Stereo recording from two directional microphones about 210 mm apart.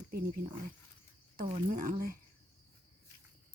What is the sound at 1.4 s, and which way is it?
Speech, 40° right (ahead or behind).